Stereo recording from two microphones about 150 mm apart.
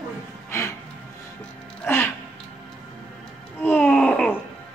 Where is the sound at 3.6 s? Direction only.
10° left (ahead or behind).